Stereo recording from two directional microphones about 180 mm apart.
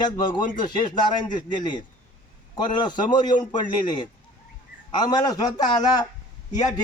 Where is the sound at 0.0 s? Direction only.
25° left (ahead or behind).